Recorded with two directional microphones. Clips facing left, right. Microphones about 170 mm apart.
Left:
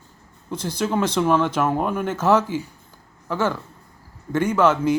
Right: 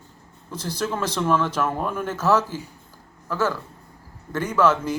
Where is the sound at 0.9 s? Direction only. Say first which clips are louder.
Left 4 dB; 10° left (ahead or behind).